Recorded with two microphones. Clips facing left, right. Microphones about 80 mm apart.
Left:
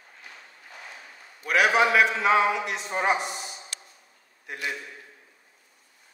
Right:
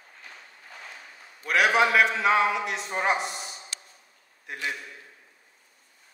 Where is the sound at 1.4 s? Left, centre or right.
Centre.